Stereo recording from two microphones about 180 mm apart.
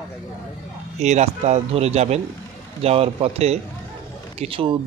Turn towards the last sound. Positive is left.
turn(degrees=-30)  # may be behind; listen again after turning